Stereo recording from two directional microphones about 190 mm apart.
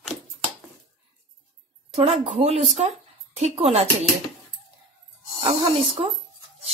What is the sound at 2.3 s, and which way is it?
Speech, 30° right (ahead or behind).